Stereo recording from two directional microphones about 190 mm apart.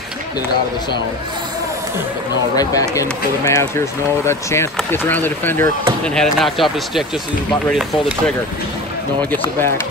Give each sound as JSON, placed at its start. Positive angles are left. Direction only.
{"t": 2.5, "sound": "speech", "side_deg": 20}